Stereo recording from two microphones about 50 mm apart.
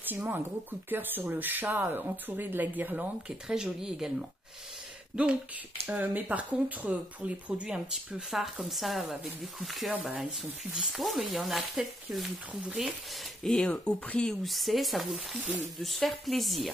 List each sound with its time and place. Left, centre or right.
0.3 s speech: right
3.3 s speech: centre
5.1 s speech: right
6.0 s speech: right
8.3 s speech: centre
10.0 s speech: centre
12.6 s speech: centre
13.4 s speech: centre
13.7 s speech: left
14.4 s speech: centre